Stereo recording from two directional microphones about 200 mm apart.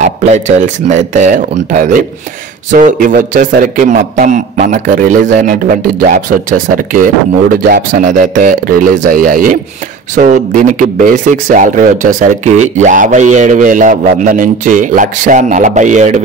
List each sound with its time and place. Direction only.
0.0 s a man's voice: 35° right (ahead or behind)